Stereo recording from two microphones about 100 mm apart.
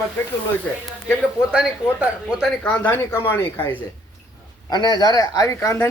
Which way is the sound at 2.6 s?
15° left (ahead or behind).